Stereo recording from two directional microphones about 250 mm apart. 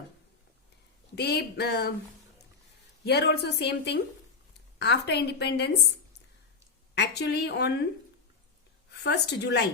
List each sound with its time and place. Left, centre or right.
1.1 s a woman's voice: left
3.0 s a woman's voice: left
6.9 s a woman's voice: left
8.9 s a woman's voice: left